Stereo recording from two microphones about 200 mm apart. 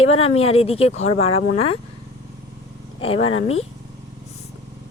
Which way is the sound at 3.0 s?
30° left (ahead or behind).